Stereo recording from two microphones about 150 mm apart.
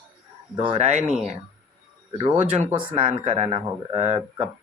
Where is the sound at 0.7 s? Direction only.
50° right (ahead or behind).